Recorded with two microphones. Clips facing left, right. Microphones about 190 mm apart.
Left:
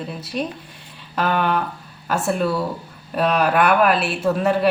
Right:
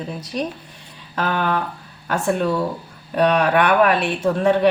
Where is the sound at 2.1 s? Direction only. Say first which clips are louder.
Right 1 dB; 5° left (ahead or behind).